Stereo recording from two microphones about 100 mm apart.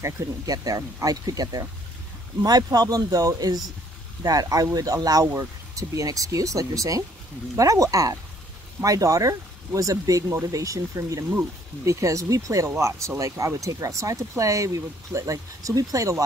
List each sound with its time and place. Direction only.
0.0 s speech: 35° right (ahead or behind)